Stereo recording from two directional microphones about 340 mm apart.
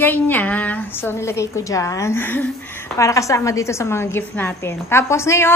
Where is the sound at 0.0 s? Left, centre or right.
Centre.